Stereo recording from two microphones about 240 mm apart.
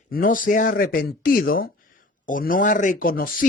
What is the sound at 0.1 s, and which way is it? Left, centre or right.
Speech, left.